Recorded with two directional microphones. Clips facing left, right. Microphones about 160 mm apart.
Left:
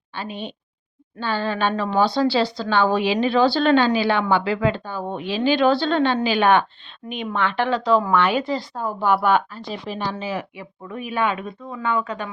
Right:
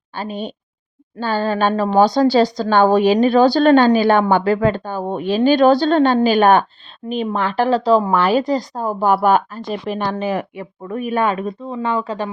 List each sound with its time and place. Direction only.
0.1 s a woman's voice: 40° right (ahead or behind)